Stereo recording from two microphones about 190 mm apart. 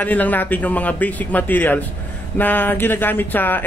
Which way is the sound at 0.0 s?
10° left (ahead or behind).